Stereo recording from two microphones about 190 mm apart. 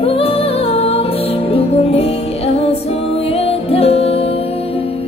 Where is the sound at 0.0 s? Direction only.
30° left (ahead or behind).